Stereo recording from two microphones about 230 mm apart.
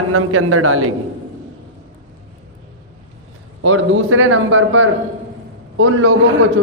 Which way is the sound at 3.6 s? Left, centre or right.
Right.